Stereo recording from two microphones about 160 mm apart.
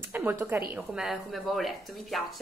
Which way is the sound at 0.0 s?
15° right (ahead or behind).